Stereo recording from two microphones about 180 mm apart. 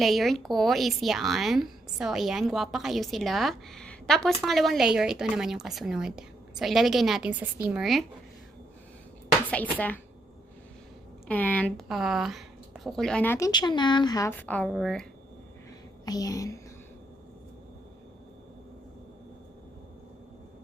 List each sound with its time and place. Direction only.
0.0 s a woman's voice: centre (ahead or behind)
9.5 s a woman's voice: 10° left (ahead or behind)
11.3 s a woman's voice: 10° left (ahead or behind)
13.5 s a woman's voice: 25° left (ahead or behind); by 15.0 s centre (ahead or behind)
16.0 s a woman's voice: 20° left (ahead or behind)